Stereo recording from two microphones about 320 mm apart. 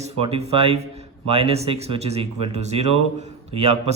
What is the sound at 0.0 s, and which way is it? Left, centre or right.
Speech, centre.